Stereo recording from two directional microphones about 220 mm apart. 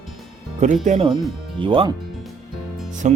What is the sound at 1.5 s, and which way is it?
Speech, 25° right (ahead or behind).